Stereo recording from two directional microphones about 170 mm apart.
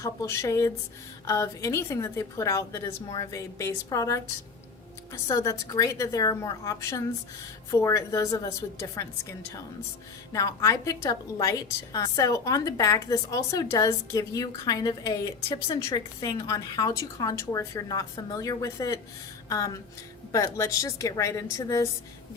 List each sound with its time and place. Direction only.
0.0 s a woman's voice: 15° left (ahead or behind)